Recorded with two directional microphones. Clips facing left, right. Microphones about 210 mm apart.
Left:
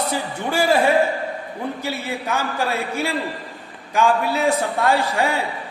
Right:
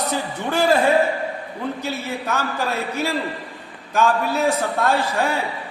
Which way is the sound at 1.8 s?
10° left (ahead or behind).